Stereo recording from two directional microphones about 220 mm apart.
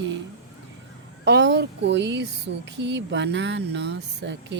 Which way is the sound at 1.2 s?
50° right (ahead or behind).